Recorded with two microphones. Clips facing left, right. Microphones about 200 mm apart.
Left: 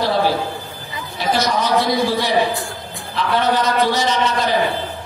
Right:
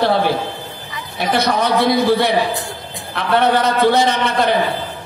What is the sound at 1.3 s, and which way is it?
A man's voice, 60° right (ahead or behind).